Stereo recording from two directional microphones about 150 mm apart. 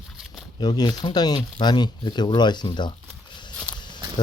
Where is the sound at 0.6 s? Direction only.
30° left (ahead or behind).